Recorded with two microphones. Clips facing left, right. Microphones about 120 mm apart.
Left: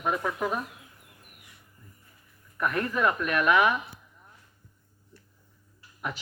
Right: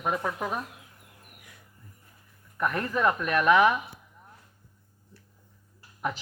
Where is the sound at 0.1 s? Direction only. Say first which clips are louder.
Left 1 dB; 25° right (ahead or behind).